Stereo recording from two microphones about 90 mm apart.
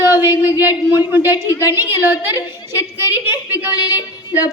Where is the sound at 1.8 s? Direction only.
25° right (ahead or behind).